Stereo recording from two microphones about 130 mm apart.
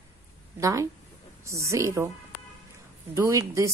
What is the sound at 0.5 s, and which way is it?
A woman's voice, 25° right (ahead or behind).